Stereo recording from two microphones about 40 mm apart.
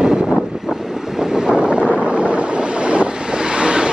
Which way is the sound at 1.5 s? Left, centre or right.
Right.